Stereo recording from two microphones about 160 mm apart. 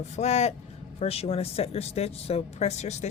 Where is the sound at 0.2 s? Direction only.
45° left (ahead or behind).